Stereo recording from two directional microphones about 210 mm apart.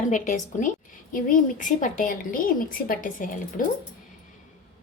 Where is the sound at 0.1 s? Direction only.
35° left (ahead or behind).